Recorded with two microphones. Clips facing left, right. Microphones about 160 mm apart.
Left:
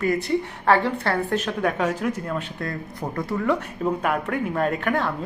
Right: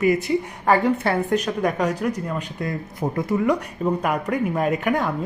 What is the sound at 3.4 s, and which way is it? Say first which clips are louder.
A woman's voice: left 1 dB; 10° right (ahead or behind).